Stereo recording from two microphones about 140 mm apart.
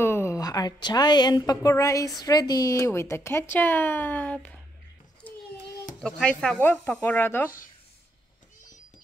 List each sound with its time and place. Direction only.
0.0 s speech: 20° left (ahead or behind)
5.2 s a sound: 10° left (ahead or behind)
5.9 s speech: 5° left (ahead or behind)